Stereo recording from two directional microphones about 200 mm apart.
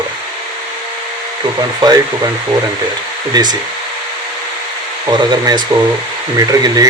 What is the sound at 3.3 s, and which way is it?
Speech, 20° right (ahead or behind).